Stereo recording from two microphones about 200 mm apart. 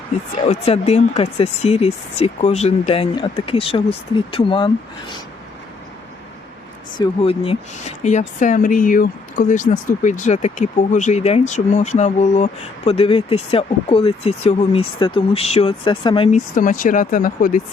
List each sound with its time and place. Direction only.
0.4 s speech: 30° left (ahead or behind)
7.0 s speech: 30° left (ahead or behind)
16.6 s speech: 40° left (ahead or behind)